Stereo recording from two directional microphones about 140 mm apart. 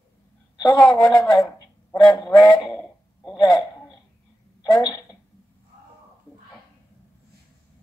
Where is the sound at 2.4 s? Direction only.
30° left (ahead or behind).